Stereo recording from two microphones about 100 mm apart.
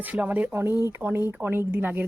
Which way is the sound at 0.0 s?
15° right (ahead or behind).